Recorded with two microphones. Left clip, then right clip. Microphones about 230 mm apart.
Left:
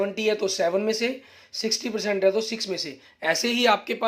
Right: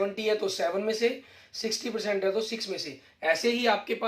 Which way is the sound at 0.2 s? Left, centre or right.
Left.